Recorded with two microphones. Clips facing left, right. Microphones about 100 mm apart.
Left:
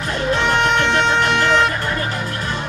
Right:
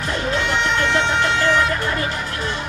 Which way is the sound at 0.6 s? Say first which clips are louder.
Left 3 dB; 60° left (ahead or behind).